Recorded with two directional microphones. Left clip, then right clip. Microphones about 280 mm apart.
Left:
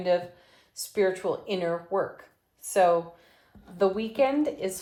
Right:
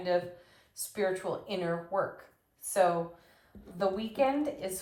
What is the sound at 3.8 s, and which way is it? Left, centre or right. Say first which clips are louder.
Speech: left 5 dB; left.